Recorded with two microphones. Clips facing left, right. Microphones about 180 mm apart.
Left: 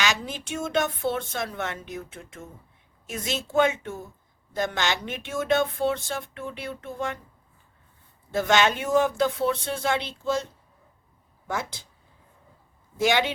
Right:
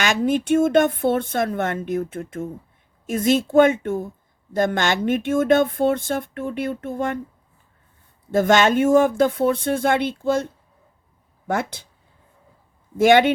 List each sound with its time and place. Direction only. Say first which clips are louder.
0.0 s speech: right 9 dB; 55° right (ahead or behind)
8.3 s speech: right 6 dB; 50° right (ahead or behind)
13.0 s speech: right 9 dB; 55° right (ahead or behind)